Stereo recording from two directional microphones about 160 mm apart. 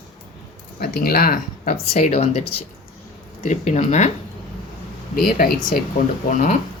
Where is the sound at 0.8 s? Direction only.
70° left (ahead or behind).